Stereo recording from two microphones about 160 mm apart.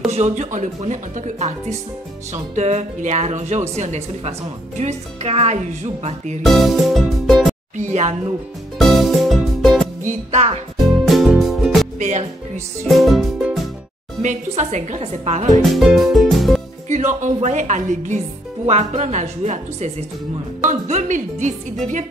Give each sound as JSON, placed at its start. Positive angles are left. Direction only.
{"t": 0.1, "sound": "speech", "side_deg": -45}
{"t": 6.4, "sound": "music", "side_deg": 0}
{"t": 7.7, "sound": "speech", "side_deg": -45}
{"t": 8.7, "sound": "music", "side_deg": 0}
{"t": 10.0, "sound": "speech", "side_deg": -45}
{"t": 11.1, "sound": "music", "side_deg": 0}
{"t": 12.0, "sound": "speech", "side_deg": -50}
{"t": 12.8, "sound": "speech", "side_deg": 0}
{"t": 14.2, "sound": "speech", "side_deg": -45}
{"t": 15.7, "sound": "music", "side_deg": 0}
{"t": 16.9, "sound": "speech", "side_deg": -45}